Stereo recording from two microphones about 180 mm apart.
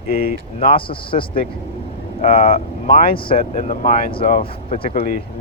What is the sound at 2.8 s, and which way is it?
Speech, 55° left (ahead or behind).